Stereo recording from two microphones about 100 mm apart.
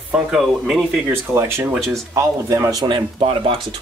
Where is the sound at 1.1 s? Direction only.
25° right (ahead or behind).